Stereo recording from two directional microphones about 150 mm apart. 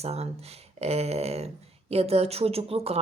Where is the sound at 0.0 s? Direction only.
45° right (ahead or behind).